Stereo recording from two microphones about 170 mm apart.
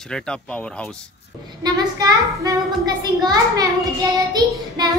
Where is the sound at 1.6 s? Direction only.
20° right (ahead or behind).